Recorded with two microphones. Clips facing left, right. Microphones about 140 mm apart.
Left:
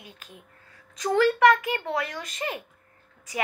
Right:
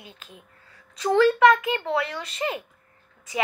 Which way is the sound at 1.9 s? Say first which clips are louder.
Right 3 dB; 45° left (ahead or behind).